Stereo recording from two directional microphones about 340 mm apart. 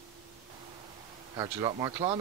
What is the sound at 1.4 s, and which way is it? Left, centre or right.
Speech, centre.